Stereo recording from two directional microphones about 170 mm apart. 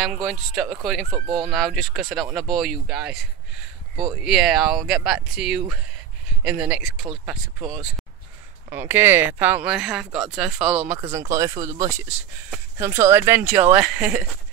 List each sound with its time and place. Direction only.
0.2 s speech: centre (ahead or behind)
4.2 s speech: centre (ahead or behind)
8.6 s speech: 15° right (ahead or behind)
11.0 s speech: 15° right (ahead or behind)